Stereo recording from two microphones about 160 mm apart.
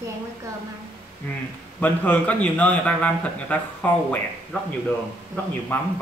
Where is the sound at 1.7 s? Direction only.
10° left (ahead or behind).